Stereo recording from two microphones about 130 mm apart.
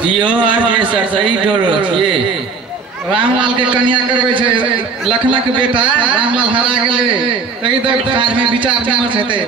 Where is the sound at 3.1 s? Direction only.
40° right (ahead or behind).